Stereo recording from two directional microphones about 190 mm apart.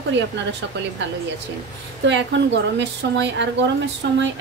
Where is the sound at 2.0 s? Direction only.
70° right (ahead or behind).